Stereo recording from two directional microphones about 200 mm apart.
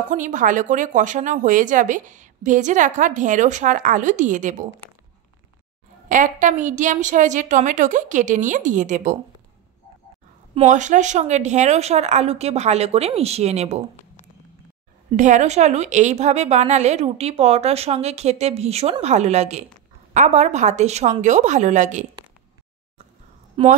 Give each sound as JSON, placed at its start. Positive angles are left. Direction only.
{"t": 0.1, "sound": "a woman's voice", "side_deg": -40}
{"t": 6.0, "sound": "a woman's voice", "side_deg": -40}
{"t": 10.5, "sound": "a woman's voice", "side_deg": -35}
{"t": 15.1, "sound": "a woman's voice", "side_deg": -35}
{"t": 23.6, "sound": "a woman's voice", "side_deg": -30}